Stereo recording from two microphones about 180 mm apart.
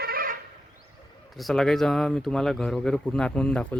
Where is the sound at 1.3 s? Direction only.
Centre (ahead or behind).